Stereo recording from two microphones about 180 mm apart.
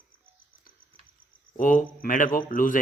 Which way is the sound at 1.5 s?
50° left (ahead or behind).